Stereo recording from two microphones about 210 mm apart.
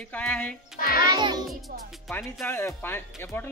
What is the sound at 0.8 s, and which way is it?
Speech, 45° left (ahead or behind).